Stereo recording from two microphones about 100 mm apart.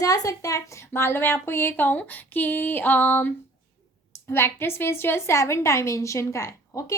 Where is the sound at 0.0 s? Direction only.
35° left (ahead or behind).